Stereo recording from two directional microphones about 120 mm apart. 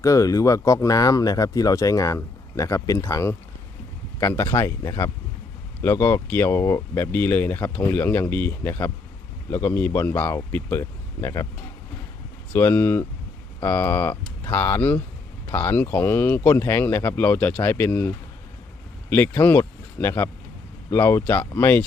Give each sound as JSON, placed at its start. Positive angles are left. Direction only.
{"t": 0.0, "sound": "speech", "side_deg": 25}
{"t": 12.5, "sound": "speech", "side_deg": 20}
{"t": 19.4, "sound": "speech", "side_deg": 20}